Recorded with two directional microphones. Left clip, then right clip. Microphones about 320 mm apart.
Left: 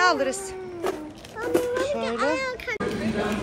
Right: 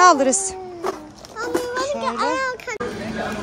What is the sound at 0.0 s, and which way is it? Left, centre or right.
Speech, centre.